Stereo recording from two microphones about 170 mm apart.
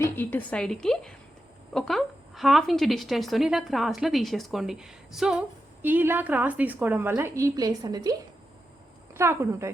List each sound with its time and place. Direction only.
0.0 s speech: 10° left (ahead or behind); by 8.1 s 25° right (ahead or behind)
9.1 s a woman's voice: 15° right (ahead or behind)